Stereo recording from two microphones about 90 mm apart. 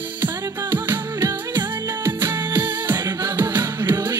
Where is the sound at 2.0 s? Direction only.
25° right (ahead or behind).